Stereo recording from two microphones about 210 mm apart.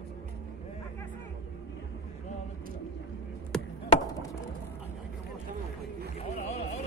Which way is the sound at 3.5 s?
5° left (ahead or behind).